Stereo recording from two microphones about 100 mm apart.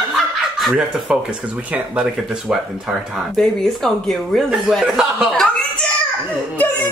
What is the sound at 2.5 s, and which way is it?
Speech, centre (ahead or behind).